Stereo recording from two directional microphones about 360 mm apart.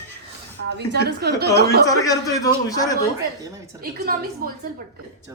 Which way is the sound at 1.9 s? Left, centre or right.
Centre.